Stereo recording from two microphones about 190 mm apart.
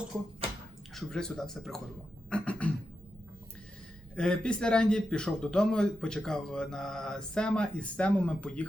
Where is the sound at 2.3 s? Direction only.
5° left (ahead or behind).